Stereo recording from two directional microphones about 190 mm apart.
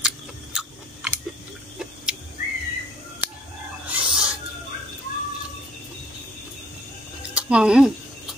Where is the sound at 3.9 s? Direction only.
5° right (ahead or behind).